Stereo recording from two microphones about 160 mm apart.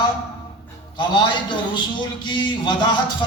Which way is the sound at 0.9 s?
30° left (ahead or behind).